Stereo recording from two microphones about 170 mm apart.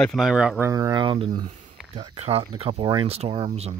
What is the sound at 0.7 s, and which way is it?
Speech, 20° right (ahead or behind).